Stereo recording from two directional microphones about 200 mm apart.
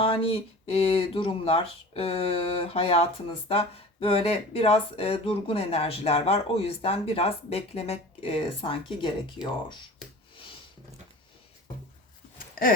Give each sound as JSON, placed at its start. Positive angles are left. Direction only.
{"t": 0.7, "sound": "speech", "side_deg": 30}
{"t": 12.6, "sound": "gasp", "side_deg": 45}